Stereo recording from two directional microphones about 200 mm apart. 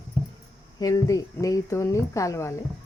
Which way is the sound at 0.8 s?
15° left (ahead or behind).